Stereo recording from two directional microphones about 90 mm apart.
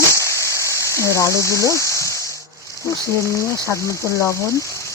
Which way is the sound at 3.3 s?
35° left (ahead or behind).